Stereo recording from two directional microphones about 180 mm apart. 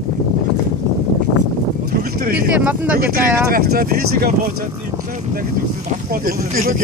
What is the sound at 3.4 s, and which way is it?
Speech, 55° right (ahead or behind).